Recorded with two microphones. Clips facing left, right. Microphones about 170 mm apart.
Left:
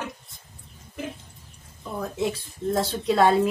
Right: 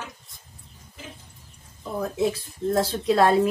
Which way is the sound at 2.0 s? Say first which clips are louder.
Right 3 dB; centre (ahead or behind).